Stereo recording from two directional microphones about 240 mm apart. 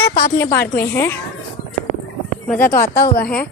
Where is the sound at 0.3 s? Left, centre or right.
Centre.